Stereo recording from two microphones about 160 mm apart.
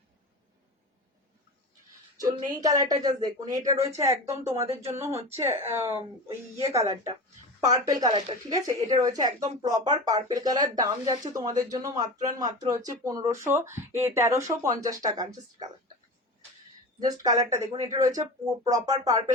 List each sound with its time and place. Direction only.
2.1 s speech: 25° right (ahead or behind)
17.0 s speech: 25° right (ahead or behind)